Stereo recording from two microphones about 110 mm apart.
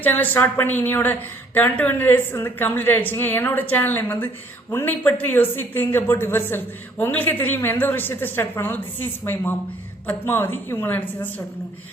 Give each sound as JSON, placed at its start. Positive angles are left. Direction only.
{"t": 0.0, "sound": "a woman's voice", "side_deg": 15}